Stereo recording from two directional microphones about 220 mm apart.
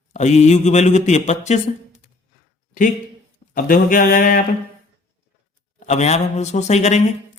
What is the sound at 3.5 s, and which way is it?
Speech, 40° left (ahead or behind).